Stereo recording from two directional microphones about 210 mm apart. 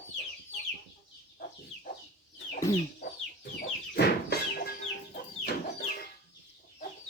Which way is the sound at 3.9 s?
50° left (ahead or behind).